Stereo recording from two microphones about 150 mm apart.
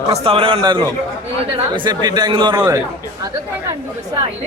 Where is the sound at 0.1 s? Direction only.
40° right (ahead or behind).